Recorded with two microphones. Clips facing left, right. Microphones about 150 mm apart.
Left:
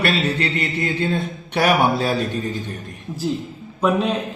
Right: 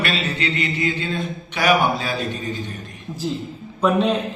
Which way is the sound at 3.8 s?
5° left (ahead or behind).